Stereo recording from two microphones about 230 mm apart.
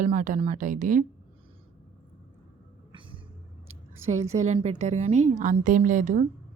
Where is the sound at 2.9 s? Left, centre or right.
Right.